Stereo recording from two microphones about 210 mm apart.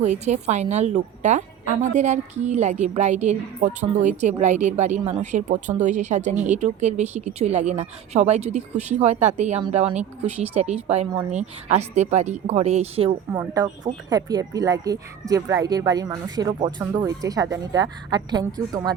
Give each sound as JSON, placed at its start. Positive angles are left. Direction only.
{"t": 0.0, "sound": "a woman's voice", "side_deg": -35}